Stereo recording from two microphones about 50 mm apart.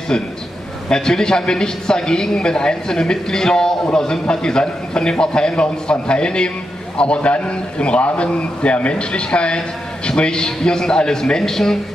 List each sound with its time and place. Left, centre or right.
0.8 s a man's voice: centre